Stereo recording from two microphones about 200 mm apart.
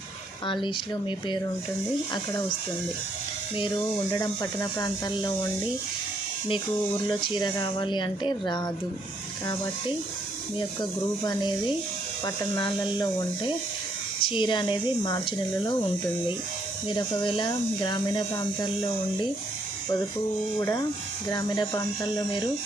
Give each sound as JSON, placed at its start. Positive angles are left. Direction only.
{"t": 0.4, "sound": "speech", "side_deg": 25}
{"t": 4.1, "sound": "speech", "side_deg": 20}
{"t": 6.9, "sound": "speech", "side_deg": 25}
{"t": 10.8, "sound": "speech", "side_deg": 20}
{"t": 16.9, "sound": "speech", "side_deg": 25}
{"t": 20.6, "sound": "speech", "side_deg": 15}